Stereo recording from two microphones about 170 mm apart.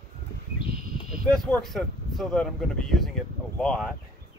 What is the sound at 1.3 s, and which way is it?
Speech, centre (ahead or behind).